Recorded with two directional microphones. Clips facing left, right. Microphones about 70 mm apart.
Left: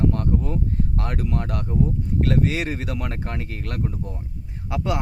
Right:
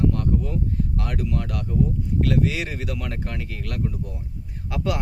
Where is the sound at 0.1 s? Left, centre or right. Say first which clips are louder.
Left 1 dB; left.